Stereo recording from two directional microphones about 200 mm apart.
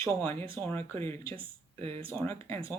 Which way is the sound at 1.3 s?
30° right (ahead or behind).